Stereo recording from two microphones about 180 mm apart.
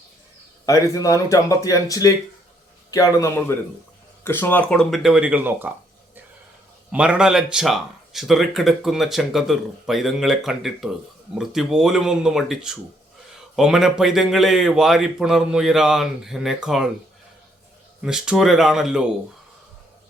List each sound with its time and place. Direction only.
0.6 s a man's voice: 20° left (ahead or behind); by 5.7 s 10° right (ahead or behind)
6.9 s speech: 5° right (ahead or behind)
18.0 s speech: 5° right (ahead or behind)